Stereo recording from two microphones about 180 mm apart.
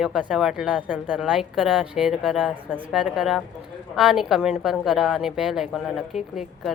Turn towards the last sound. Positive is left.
turn(degrees=0)  # may be behind; listen again after turning